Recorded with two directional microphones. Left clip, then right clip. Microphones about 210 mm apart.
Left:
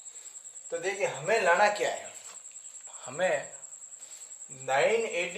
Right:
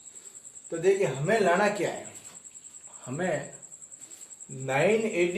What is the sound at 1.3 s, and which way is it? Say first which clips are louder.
Speech: even; 35° left (ahead or behind).